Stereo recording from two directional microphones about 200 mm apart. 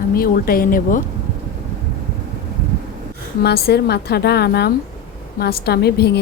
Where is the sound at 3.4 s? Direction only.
50° left (ahead or behind).